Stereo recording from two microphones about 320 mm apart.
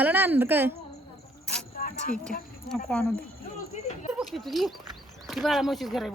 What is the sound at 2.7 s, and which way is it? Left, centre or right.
Speech, centre.